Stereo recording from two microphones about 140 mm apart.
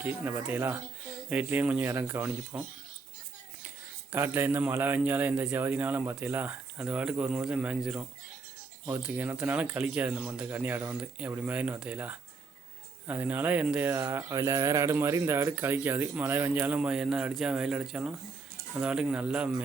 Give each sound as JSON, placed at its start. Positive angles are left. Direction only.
{"t": 0.0, "sound": "speech", "side_deg": -15}
{"t": 4.1, "sound": "speech", "side_deg": -15}